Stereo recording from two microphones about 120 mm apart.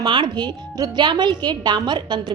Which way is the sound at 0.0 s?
40° right (ahead or behind).